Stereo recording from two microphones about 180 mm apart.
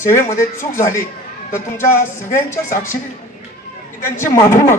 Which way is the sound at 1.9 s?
15° left (ahead or behind).